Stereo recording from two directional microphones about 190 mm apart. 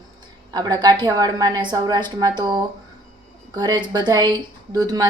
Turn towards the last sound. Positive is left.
turn(degrees=-20)  # may be behind; listen again after turning